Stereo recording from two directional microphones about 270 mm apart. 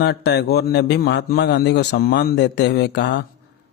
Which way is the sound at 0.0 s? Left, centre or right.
Left.